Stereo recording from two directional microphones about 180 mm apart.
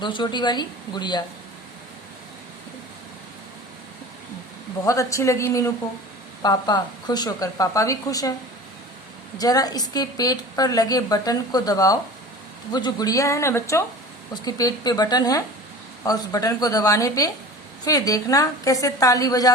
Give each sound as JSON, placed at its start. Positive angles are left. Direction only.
{"t": 0.0, "sound": "a woman's voice", "side_deg": 25}
{"t": 4.9, "sound": "a woman's voice", "side_deg": 15}
{"t": 9.4, "sound": "a woman's voice", "side_deg": 20}